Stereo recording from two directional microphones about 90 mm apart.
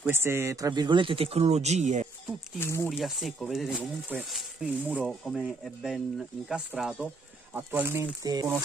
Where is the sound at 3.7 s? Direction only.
10° right (ahead or behind).